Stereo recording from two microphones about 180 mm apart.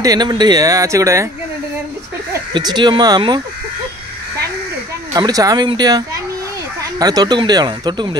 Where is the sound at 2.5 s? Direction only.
25° right (ahead or behind).